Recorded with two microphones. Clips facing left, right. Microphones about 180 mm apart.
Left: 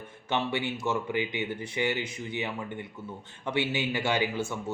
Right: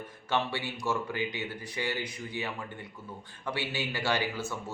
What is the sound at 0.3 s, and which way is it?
Speech, 20° left (ahead or behind).